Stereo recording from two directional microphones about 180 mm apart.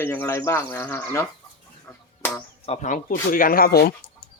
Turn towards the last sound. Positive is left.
turn(degrees=60)  # may be behind; listen again after turning